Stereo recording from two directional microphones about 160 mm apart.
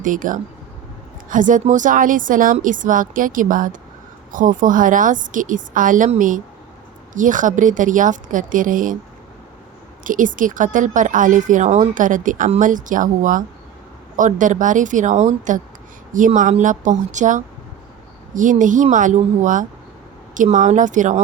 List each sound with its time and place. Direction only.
0.0 s speech: 55° right (ahead or behind)
10.0 s speech: 55° right (ahead or behind)